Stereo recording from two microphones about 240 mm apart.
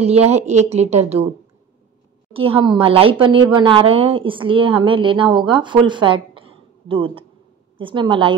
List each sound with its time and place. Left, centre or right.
0.0 s a woman's voice: right
2.3 s a woman's voice: right